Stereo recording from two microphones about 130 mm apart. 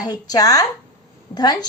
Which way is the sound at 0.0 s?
30° left (ahead or behind).